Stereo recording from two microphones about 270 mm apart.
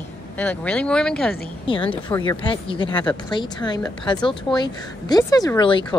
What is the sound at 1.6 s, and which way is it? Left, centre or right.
Speech, centre.